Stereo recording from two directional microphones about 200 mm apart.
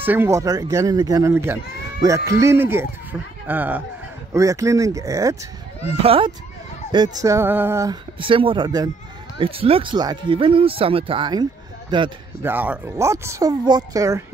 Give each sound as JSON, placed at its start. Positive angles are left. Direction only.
{"t": 0.0, "sound": "speech", "side_deg": -10}
{"t": 6.0, "sound": "speech", "side_deg": -25}
{"t": 12.4, "sound": "speech", "side_deg": -10}